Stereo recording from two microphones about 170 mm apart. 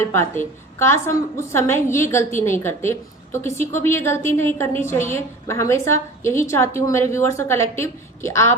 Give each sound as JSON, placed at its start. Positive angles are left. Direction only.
{"t": 0.0, "sound": "a woman's voice", "side_deg": 15}